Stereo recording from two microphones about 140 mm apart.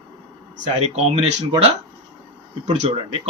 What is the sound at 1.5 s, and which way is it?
Speech, 45° right (ahead or behind).